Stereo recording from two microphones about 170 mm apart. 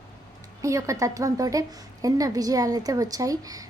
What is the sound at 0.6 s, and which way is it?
A woman's voice, 20° right (ahead or behind).